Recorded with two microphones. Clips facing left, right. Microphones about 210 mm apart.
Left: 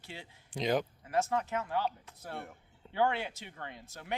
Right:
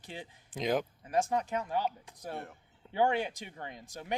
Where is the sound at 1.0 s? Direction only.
15° right (ahead or behind).